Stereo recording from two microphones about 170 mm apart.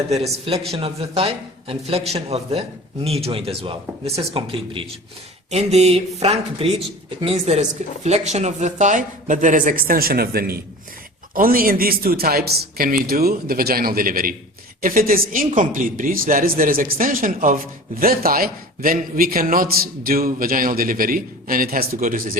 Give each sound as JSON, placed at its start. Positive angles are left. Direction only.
{"t": 0.1, "sound": "speech", "side_deg": -35}